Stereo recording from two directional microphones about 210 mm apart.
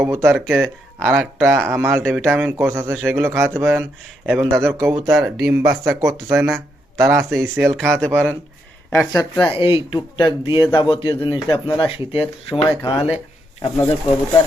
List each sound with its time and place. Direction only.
0.0 s speech: 10° right (ahead or behind)
2.0 s speech: centre (ahead or behind); by 5.1 s 15° right (ahead or behind)
5.1 s speech: 5° right (ahead or behind)
5.5 s speech: 15° right (ahead or behind)
8.9 s speech: 15° left (ahead or behind)